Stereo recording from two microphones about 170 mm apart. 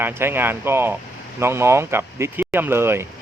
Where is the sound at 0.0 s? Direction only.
15° right (ahead or behind).